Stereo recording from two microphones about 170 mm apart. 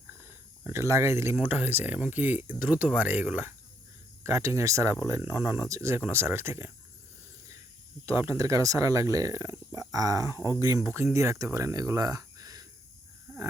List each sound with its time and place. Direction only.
0.6 s speech: 15° right (ahead or behind)
8.0 s speech: 15° right (ahead or behind)